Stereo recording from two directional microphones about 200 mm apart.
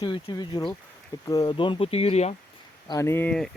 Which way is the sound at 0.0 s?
20° left (ahead or behind).